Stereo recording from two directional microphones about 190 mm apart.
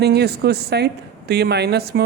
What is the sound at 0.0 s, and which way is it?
Speech, 60° right (ahead or behind).